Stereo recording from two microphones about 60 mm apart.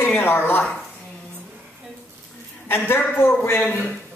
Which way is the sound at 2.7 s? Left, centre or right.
Left.